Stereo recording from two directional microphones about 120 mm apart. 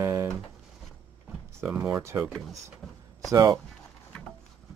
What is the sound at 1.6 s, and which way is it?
Speech, 15° right (ahead or behind).